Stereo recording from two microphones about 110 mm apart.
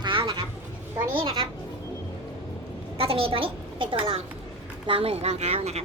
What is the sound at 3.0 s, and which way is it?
A woman's voice, 60° right (ahead or behind).